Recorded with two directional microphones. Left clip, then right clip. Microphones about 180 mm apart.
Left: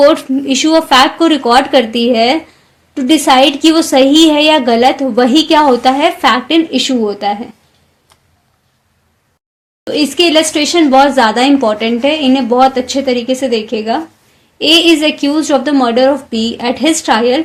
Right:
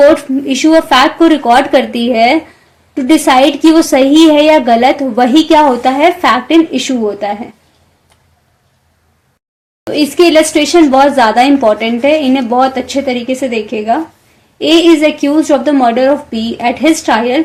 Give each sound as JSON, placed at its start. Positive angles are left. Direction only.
{"t": 0.0, "sound": "a woman's voice", "side_deg": 35}
{"t": 9.9, "sound": "a woman's voice", "side_deg": 35}